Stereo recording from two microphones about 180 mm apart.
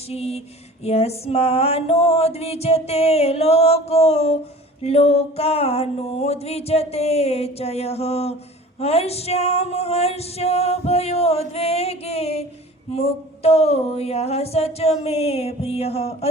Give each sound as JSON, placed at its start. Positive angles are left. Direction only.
{"t": 0.1, "sound": "music", "side_deg": 35}